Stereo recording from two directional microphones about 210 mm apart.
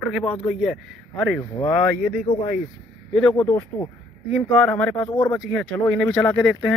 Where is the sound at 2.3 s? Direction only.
25° left (ahead or behind).